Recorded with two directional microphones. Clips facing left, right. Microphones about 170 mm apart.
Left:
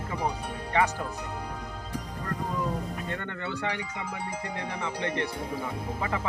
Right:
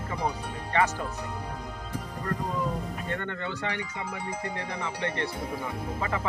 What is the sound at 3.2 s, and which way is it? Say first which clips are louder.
Speech: even; 15° left (ahead or behind).